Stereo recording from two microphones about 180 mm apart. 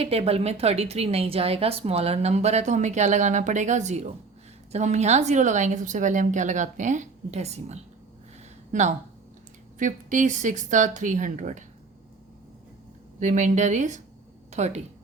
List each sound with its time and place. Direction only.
0.0 s a woman's voice: 35° right (ahead or behind)
13.1 s speech: 45° right (ahead or behind)